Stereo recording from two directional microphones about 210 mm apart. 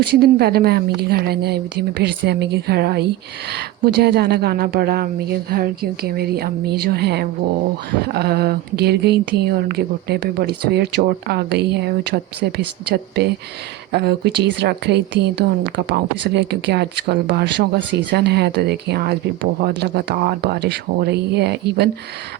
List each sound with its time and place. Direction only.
0.2 s speech: 50° right (ahead or behind)